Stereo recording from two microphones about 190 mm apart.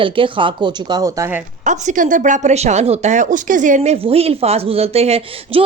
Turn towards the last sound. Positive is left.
turn(degrees=-35)  # may be behind; listen again after turning